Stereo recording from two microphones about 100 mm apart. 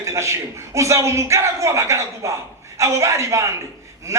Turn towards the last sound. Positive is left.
turn(degrees=-30)  # may be behind; listen again after turning